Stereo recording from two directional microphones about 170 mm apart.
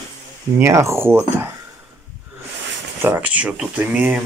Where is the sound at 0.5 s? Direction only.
15° right (ahead or behind).